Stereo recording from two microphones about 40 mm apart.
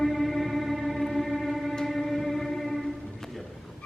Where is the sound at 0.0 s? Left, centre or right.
Centre.